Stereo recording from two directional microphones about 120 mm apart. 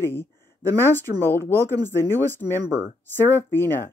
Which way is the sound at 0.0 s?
20° left (ahead or behind).